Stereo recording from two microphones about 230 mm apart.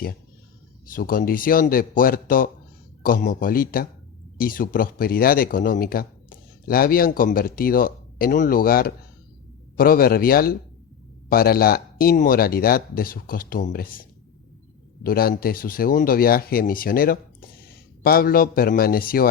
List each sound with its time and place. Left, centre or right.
0.9 s speech: left
15.0 s speech: left